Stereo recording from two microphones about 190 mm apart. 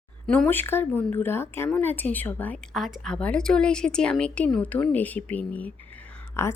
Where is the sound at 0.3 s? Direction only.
5° left (ahead or behind).